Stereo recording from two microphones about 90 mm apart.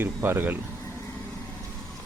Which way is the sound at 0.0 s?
25° right (ahead or behind).